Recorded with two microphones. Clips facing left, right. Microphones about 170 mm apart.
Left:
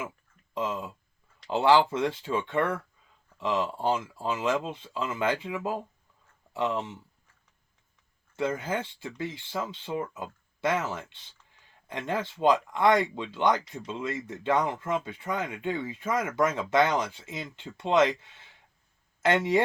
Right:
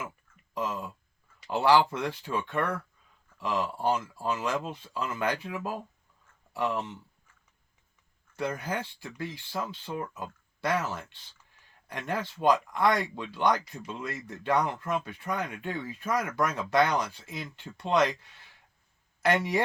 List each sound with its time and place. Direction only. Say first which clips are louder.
0.5 s speech: left 2 dB; 20° left (ahead or behind)
8.4 s speech: left 3 dB; 20° left (ahead or behind)